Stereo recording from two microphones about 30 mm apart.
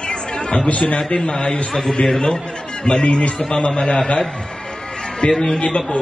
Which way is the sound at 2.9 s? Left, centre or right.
Left.